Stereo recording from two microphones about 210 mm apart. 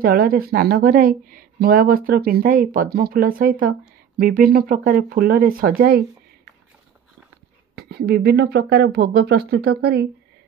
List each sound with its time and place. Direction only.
0.0 s speech: 45° right (ahead or behind)
7.7 s speech: 50° right (ahead or behind)